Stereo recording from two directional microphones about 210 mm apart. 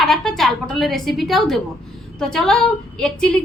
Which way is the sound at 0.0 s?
Centre (ahead or behind).